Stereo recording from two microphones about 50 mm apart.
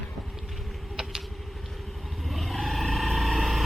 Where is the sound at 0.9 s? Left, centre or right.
Centre.